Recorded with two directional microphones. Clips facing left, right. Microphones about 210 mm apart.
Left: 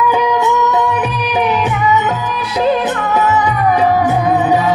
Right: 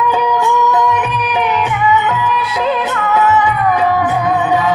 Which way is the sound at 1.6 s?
45° left (ahead or behind).